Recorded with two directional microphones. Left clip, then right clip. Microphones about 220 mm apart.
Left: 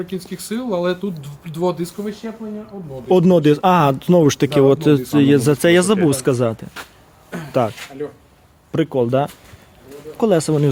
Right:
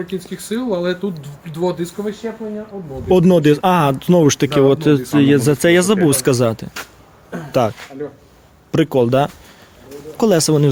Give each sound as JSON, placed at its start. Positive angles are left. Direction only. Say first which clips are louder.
{"t": 0.1, "sound": "speech", "louder": "right 3 dB", "side_deg": 45}
{"t": 3.1, "sound": "speech", "louder": "right 1 dB", "side_deg": 0}